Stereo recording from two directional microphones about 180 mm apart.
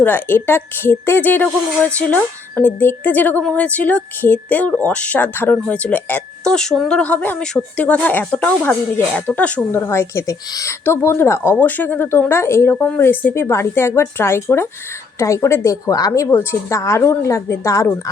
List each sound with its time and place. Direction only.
0.0 s a woman's voice: 10° left (ahead or behind)